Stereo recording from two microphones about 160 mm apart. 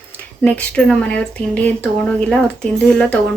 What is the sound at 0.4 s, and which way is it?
Speech, 5° left (ahead or behind).